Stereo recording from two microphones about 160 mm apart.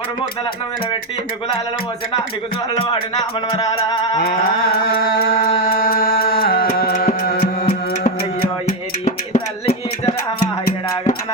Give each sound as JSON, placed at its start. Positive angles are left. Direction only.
{"t": 2.7, "sound": "a sound", "side_deg": 35}
{"t": 4.7, "sound": "music", "side_deg": 70}
{"t": 9.0, "sound": "music", "side_deg": 45}